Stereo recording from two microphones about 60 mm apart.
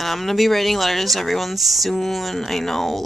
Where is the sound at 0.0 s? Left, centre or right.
Centre.